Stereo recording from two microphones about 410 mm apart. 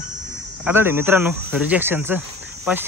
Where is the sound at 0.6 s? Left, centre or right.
Centre.